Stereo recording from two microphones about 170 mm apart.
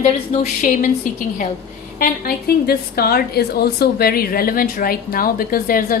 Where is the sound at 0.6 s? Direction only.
50° left (ahead or behind).